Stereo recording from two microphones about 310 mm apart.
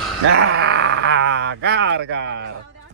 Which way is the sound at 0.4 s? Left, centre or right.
Right.